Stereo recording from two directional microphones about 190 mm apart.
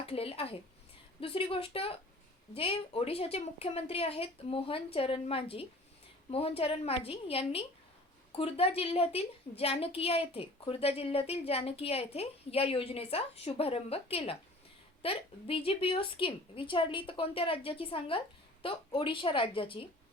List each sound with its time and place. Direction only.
0.0 s a woman's voice: 30° left (ahead or behind)